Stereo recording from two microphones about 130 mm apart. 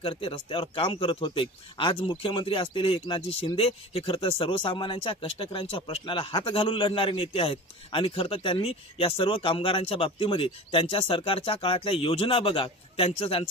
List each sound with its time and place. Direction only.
0.0 s speech: 45° left (ahead or behind)